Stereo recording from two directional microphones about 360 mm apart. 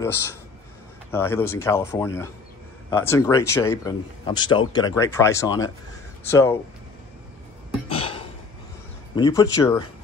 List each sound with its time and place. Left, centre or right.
1.1 s speech: centre
7.9 s a sound: centre
9.1 s speech: centre